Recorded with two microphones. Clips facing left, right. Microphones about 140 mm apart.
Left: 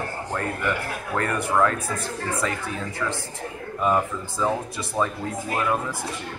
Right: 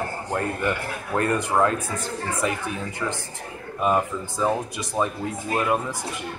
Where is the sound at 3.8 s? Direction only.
20° right (ahead or behind).